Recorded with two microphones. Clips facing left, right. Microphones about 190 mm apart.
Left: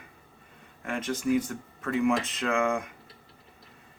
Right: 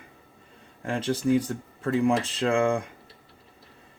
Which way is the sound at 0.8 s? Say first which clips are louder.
Right 4 dB; 30° right (ahead or behind).